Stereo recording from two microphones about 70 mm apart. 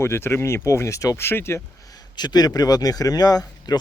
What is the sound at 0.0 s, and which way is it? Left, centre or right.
Speech, left.